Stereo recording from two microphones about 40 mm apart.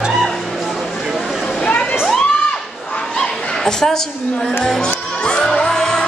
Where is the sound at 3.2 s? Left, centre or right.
Centre.